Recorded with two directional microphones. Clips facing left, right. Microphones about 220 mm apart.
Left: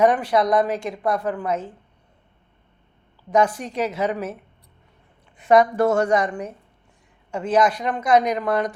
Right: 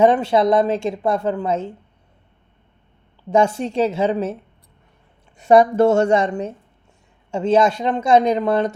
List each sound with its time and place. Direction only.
0.0 s a woman's voice: 25° right (ahead or behind)
3.2 s a woman's voice: 25° right (ahead or behind)
5.4 s a woman's voice: 30° right (ahead or behind)